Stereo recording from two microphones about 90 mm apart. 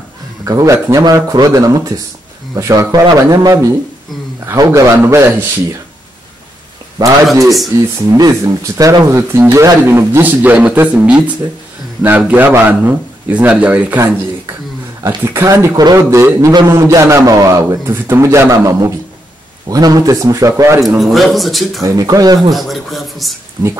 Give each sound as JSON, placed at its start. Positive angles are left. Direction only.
{"t": 0.5, "sound": "a man's voice", "side_deg": -35}
{"t": 1.0, "sound": "a man's voice", "side_deg": -45}
{"t": 8.1, "sound": "speech", "side_deg": -40}
{"t": 15.0, "sound": "a man's voice", "side_deg": -25}
{"t": 15.7, "sound": "speech", "side_deg": -50}
{"t": 16.1, "sound": "a man's voice", "side_deg": -30}
{"t": 21.0, "sound": "speech", "side_deg": 0}
{"t": 21.8, "sound": "speech", "side_deg": -40}
{"t": 22.6, "sound": "speech", "side_deg": 0}
{"t": 23.6, "sound": "speech", "side_deg": -45}